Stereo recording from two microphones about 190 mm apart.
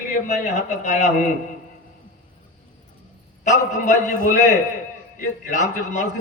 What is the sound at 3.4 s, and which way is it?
A man's voice, 40° left (ahead or behind).